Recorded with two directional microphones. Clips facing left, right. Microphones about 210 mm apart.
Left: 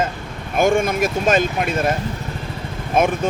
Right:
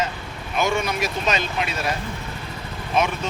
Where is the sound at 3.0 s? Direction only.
50° left (ahead or behind).